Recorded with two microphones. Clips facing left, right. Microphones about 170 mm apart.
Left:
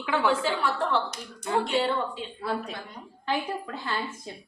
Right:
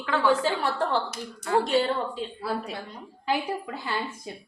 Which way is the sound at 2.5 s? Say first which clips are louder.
Left 3 dB; 5° right (ahead or behind).